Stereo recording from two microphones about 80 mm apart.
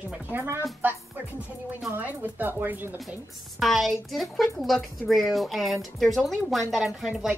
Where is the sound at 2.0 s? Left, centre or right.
Right.